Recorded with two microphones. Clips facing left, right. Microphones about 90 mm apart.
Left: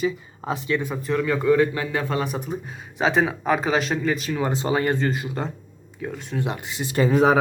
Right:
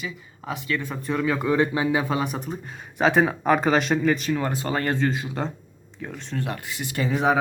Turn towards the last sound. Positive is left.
turn(degrees=35)  # may be behind; listen again after turning